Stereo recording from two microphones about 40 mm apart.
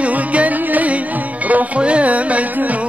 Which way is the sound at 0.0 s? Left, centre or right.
Right.